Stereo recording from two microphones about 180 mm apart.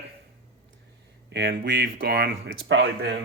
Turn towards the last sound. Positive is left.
turn(degrees=-80)